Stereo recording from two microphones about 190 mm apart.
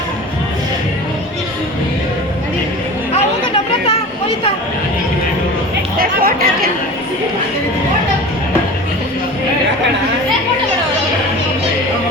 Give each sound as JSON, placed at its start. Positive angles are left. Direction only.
{"t": 6.0, "sound": "chatter", "side_deg": -50}